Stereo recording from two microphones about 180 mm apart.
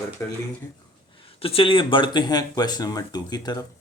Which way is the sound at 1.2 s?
30° left (ahead or behind).